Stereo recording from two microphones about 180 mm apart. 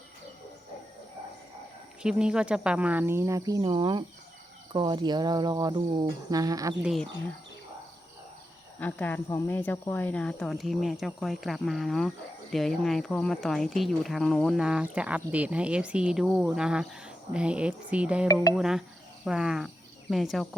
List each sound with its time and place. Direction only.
2.0 s speech: 5° right (ahead or behind); by 4.0 s 25° right (ahead or behind)
4.7 s cricket: 25° right (ahead or behind)
6.8 s speech: centre (ahead or behind)
8.8 s speech: 10° left (ahead or behind)